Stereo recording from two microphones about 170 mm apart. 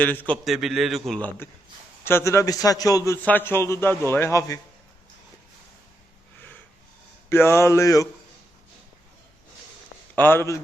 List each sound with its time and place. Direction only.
0.0 s a man's voice: 10° left (ahead or behind)
0.4 s a man's voice: centre (ahead or behind); by 4.6 s 20° left (ahead or behind)
7.3 s a man's voice: 15° left (ahead or behind)
10.2 s a man's voice: 10° left (ahead or behind)